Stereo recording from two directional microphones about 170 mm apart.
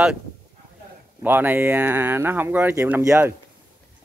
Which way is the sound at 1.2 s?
10° right (ahead or behind).